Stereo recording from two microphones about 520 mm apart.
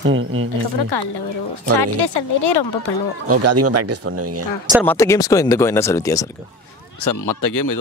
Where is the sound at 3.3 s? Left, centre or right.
Right.